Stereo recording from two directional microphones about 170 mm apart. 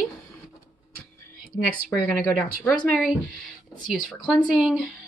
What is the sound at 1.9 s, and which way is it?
Speech, 5° left (ahead or behind).